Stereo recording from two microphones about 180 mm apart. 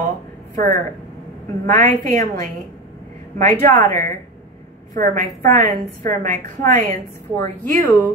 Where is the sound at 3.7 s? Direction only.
15° left (ahead or behind).